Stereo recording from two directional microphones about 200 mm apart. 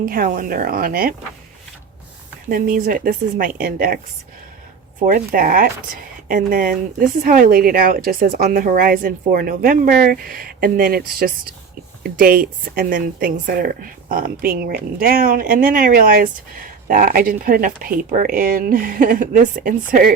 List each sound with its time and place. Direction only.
0.0 s a woman's voice: 45° right (ahead or behind)
2.5 s a woman's voice: 45° right (ahead or behind)